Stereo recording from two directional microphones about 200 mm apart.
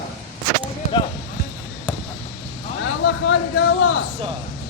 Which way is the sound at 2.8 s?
70° left (ahead or behind).